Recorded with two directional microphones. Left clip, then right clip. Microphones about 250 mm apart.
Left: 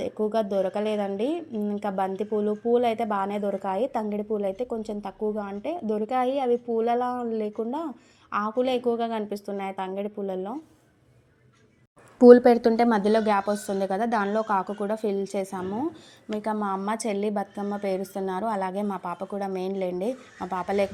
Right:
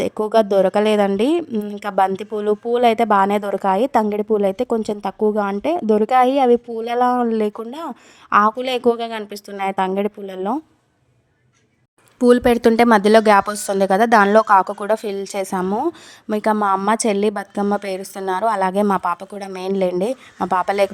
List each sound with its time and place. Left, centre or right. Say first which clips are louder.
0.0 s speech: right 9 dB; right
12.2 s speech: left 1 dB; right
12.5 s speech: right 6 dB; right
13.1 s speech: right 10 dB; right